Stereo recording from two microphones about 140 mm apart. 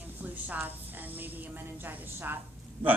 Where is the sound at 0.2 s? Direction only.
10° right (ahead or behind).